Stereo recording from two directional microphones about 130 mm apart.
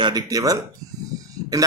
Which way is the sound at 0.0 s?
30° right (ahead or behind).